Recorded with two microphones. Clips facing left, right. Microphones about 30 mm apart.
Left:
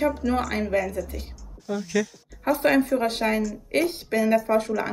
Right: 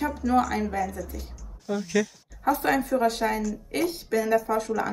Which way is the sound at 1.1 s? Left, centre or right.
Left.